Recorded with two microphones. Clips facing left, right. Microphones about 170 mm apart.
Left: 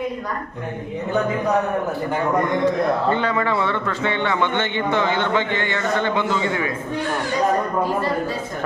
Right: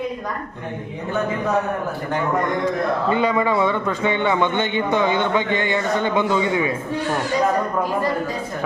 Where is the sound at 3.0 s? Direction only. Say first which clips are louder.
Right 2 dB; 10° right (ahead or behind).